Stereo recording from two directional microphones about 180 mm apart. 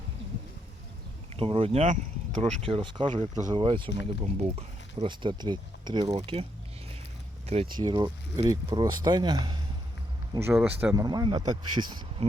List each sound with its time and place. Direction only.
1.4 s speech: 30° right (ahead or behind)
7.4 s speech: 35° right (ahead or behind)
7.8 s speech: 25° right (ahead or behind)
10.5 s speech: 5° right (ahead or behind)
10.9 s speech: 20° right (ahead or behind)